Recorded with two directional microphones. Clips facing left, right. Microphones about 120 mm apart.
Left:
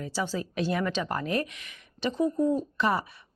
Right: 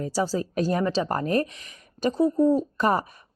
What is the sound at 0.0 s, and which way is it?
A woman's voice, 40° right (ahead or behind).